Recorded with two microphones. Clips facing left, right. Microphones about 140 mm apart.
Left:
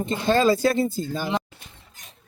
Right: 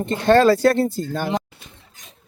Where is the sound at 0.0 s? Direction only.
65° right (ahead or behind).